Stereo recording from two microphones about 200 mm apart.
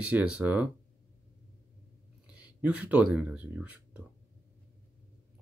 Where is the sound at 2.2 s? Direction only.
5° right (ahead or behind).